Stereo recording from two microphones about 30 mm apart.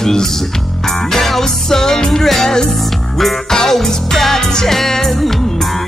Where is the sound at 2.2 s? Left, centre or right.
Centre.